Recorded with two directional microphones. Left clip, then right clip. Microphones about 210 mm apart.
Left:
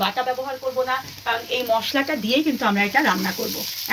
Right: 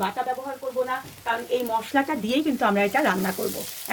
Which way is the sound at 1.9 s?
35° right (ahead or behind).